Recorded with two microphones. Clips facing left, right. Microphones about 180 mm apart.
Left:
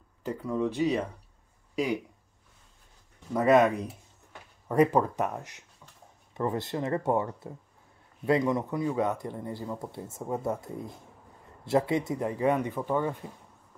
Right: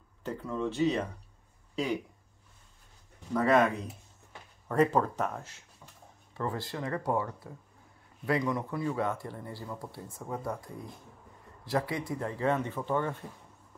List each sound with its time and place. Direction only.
0.2 s speech: 10° left (ahead or behind)
3.3 s speech: 20° left (ahead or behind)